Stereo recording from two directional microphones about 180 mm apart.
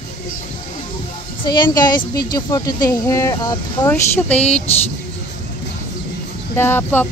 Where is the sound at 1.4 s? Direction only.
25° left (ahead or behind).